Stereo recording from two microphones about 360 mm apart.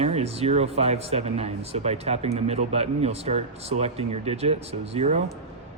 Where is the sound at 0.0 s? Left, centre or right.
Centre.